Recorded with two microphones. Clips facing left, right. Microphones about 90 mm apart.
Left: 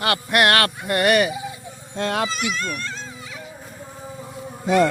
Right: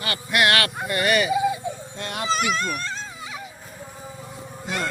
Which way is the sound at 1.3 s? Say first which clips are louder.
Right 9 dB; 75° right (ahead or behind).